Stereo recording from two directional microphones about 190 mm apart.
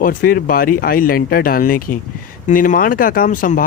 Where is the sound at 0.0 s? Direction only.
45° left (ahead or behind).